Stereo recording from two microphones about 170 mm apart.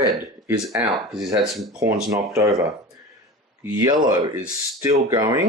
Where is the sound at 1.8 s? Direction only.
20° right (ahead or behind).